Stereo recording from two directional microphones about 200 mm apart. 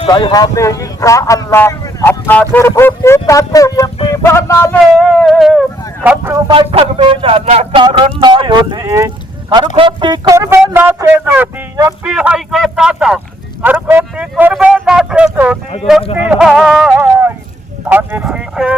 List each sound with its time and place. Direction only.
0.0 s speech: 25° left (ahead or behind)
5.0 s speech: centre (ahead or behind)
6.5 s speech: 25° right (ahead or behind); by 17.3 s 10° right (ahead or behind)
17.8 s a sound: 10° right (ahead or behind)